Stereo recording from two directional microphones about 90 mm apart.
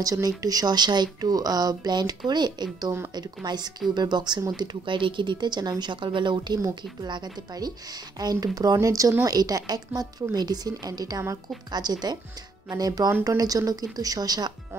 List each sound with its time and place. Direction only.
0.0 s a woman's voice: 40° right (ahead or behind)